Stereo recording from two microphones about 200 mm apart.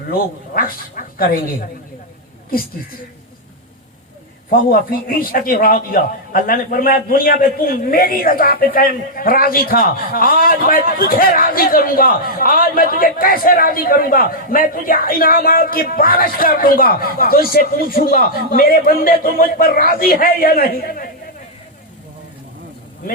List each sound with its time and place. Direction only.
0.1 s a man's voice: 45° left (ahead or behind)
4.4 s a man's voice: 45° left (ahead or behind)